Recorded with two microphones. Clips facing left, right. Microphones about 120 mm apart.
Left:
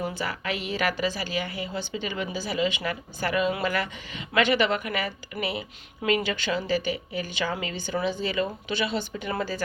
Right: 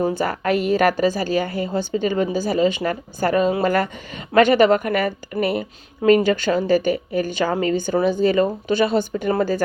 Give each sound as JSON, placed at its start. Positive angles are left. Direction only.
{"t": 0.0, "sound": "a woman's voice", "side_deg": -45}